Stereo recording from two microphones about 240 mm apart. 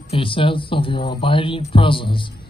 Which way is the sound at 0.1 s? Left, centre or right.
Left.